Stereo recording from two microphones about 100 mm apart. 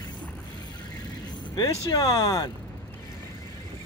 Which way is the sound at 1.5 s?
45° left (ahead or behind).